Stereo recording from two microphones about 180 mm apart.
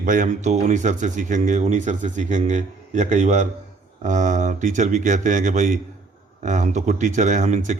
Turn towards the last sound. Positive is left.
turn(degrees=-45)  # may be behind; listen again after turning